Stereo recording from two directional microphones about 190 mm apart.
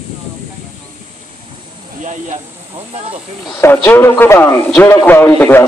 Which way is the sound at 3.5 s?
10° left (ahead or behind).